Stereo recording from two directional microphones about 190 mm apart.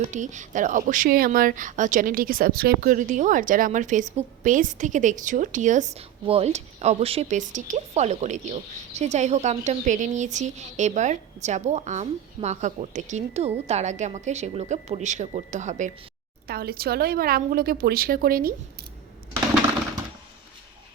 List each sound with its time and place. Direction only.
0.1 s speech: 40° right (ahead or behind)
16.5 s a woman's voice: 55° right (ahead or behind)